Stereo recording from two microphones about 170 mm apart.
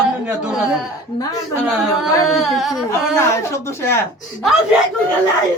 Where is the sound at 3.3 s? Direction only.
15° left (ahead or behind).